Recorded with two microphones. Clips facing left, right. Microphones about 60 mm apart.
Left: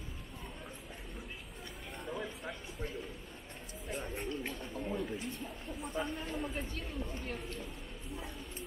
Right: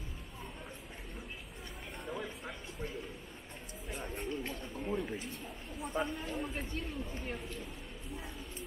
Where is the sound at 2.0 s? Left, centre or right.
Centre.